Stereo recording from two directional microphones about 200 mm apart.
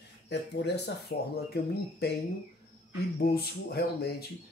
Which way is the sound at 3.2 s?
50° left (ahead or behind).